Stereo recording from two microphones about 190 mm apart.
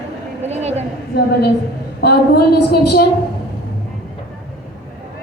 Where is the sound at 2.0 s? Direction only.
60° left (ahead or behind).